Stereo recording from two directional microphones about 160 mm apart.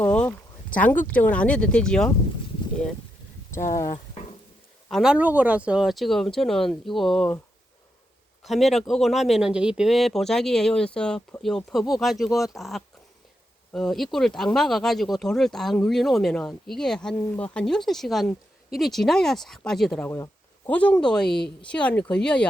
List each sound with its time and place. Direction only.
0.1 s speech: 5° left (ahead or behind)
4.9 s speech: centre (ahead or behind)
8.4 s speech: centre (ahead or behind)
20.1 s a sound: 15° left (ahead or behind)
21.0 s speech: 5° left (ahead or behind)